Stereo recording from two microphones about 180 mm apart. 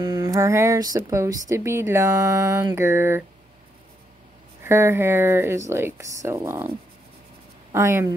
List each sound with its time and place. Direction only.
0.0 s speech: 20° right (ahead or behind)
4.6 s speech: 15° right (ahead or behind)
7.7 s speech: 15° right (ahead or behind)